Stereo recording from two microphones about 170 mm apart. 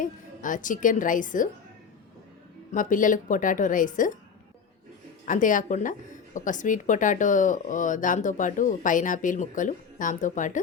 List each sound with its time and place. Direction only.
0.0 s a woman's voice: 50° left (ahead or behind)
2.7 s a woman's voice: 50° left (ahead or behind)
5.2 s a woman's voice: 50° left (ahead or behind)